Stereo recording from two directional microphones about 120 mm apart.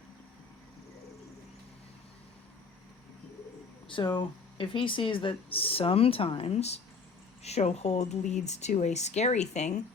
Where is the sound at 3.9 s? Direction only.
40° left (ahead or behind).